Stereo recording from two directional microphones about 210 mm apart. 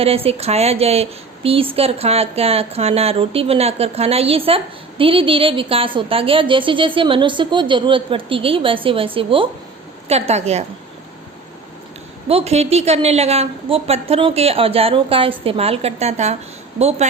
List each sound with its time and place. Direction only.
0.0 s a woman's voice: 30° right (ahead or behind)
12.3 s speech: 30° right (ahead or behind)